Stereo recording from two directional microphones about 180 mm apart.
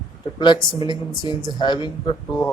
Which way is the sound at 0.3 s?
25° left (ahead or behind).